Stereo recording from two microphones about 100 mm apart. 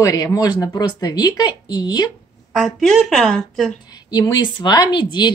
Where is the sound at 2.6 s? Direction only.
Centre (ahead or behind).